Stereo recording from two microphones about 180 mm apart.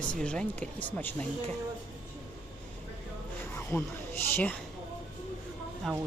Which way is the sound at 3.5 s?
15° left (ahead or behind).